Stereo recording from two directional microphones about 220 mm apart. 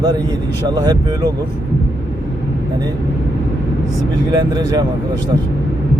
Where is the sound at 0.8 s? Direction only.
15° right (ahead or behind).